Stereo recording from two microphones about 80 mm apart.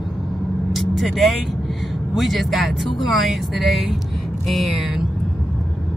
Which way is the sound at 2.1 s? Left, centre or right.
Centre.